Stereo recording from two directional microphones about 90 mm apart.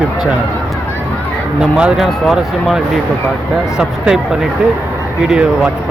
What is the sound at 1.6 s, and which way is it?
Speech, 10° right (ahead or behind).